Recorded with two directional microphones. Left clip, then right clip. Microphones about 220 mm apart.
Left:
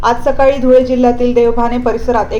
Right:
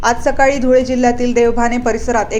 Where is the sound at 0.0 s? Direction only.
25° right (ahead or behind).